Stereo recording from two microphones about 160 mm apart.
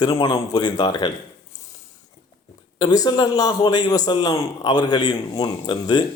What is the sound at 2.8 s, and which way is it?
A man's voice, 25° left (ahead or behind).